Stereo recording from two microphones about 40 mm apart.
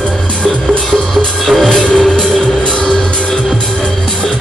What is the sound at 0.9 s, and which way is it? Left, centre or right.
Music, centre.